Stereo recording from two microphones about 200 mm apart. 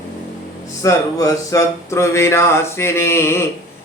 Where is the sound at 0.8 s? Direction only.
15° left (ahead or behind).